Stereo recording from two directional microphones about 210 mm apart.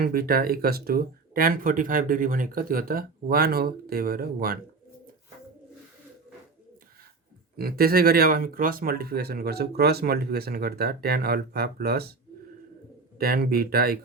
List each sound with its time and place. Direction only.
0.0 s speech: 45° right (ahead or behind)
7.5 s speech: 45° right (ahead or behind)
13.1 s speech: 45° right (ahead or behind)